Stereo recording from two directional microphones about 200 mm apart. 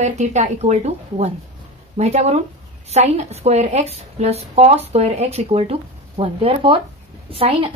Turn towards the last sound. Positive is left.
turn(degrees=-30)  # may be behind; listen again after turning